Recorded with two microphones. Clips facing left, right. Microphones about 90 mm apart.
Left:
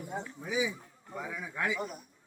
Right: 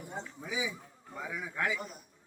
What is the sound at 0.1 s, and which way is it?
Speech, 10° left (ahead or behind).